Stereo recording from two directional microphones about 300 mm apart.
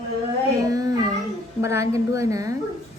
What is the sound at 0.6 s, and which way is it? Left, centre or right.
Child singing, centre.